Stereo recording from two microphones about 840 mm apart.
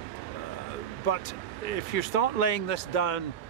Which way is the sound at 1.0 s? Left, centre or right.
Left.